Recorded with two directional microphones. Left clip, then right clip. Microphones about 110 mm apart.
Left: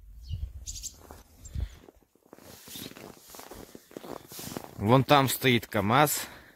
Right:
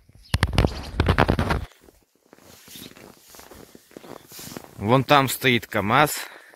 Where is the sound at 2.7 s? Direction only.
30° left (ahead or behind).